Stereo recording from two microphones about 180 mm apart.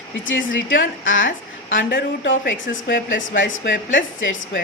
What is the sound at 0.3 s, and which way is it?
Speech, 90° left.